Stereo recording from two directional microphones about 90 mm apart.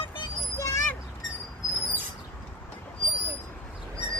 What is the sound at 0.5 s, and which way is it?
Vehicle, 35° left (ahead or behind).